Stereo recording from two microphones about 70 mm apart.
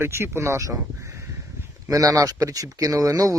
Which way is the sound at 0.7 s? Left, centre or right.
Right.